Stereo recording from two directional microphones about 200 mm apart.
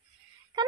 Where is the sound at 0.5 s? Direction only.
20° right (ahead or behind).